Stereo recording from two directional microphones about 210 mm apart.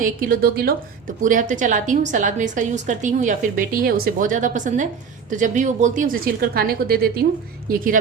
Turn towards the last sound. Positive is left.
turn(degrees=-40)  # may be behind; listen again after turning